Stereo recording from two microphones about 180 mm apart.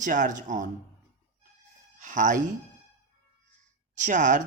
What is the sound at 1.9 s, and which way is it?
Speech, 45° right (ahead or behind).